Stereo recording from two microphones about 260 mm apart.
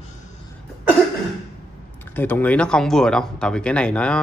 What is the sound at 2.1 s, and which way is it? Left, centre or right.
Speech, centre.